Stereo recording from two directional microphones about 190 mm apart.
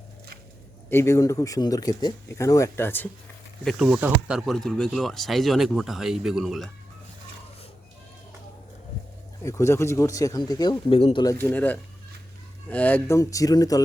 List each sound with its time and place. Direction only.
0.9 s speech: 15° left (ahead or behind)
3.6 s speech: centre (ahead or behind)
9.4 s speech: 15° left (ahead or behind)
11.3 s speech: 10° left (ahead or behind)